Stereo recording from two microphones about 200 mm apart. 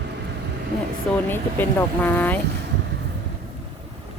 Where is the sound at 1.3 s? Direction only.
10° left (ahead or behind).